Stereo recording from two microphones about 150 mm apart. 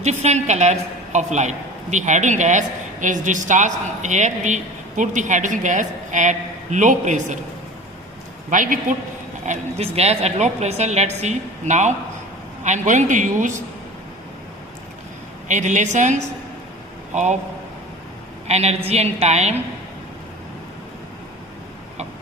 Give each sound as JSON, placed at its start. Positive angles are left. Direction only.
{"t": 0.0, "sound": "a woman's voice", "side_deg": -50}
{"t": 8.4, "sound": "speech", "side_deg": -60}
{"t": 9.5, "sound": "a woman's voice", "side_deg": -45}
{"t": 15.4, "sound": "a woman's voice", "side_deg": -55}
{"t": 18.4, "sound": "a woman's voice", "side_deg": -45}